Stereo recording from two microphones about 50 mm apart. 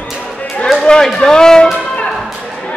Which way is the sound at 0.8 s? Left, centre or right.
Centre.